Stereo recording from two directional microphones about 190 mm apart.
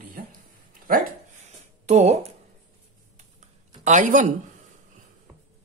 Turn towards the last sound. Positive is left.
turn(degrees=-40)  # may be behind; listen again after turning